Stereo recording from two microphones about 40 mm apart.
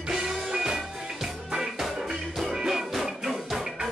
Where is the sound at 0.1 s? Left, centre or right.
Centre.